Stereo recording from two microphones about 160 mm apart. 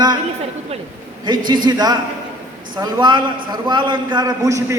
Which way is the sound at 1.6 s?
25° right (ahead or behind).